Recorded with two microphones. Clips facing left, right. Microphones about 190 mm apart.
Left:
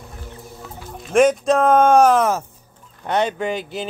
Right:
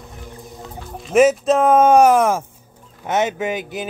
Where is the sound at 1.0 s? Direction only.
5° right (ahead or behind).